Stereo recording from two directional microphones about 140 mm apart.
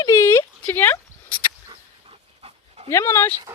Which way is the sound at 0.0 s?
20° left (ahead or behind).